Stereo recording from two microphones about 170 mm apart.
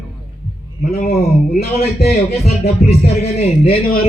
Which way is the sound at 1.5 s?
70° left (ahead or behind).